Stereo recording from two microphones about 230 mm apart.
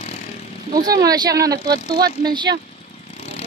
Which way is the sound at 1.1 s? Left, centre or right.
Centre.